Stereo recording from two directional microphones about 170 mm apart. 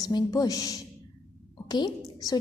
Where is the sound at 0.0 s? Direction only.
20° left (ahead or behind).